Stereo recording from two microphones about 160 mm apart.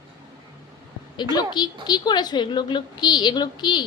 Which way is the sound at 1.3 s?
25° left (ahead or behind).